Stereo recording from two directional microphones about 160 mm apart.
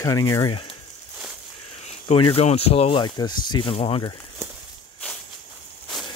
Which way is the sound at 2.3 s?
40° left (ahead or behind).